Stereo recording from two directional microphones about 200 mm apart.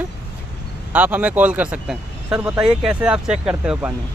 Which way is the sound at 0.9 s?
5° right (ahead or behind).